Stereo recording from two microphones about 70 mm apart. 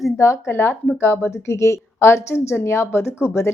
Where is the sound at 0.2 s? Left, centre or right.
Left.